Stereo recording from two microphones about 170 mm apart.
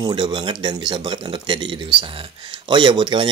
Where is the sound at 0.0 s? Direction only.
25° right (ahead or behind).